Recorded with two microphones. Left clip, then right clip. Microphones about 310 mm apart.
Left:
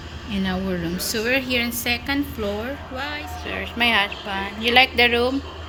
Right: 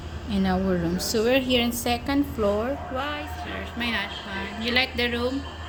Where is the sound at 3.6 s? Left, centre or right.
Centre.